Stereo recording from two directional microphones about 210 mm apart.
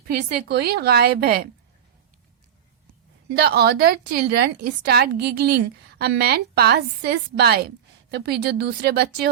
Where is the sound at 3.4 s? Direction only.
50° right (ahead or behind).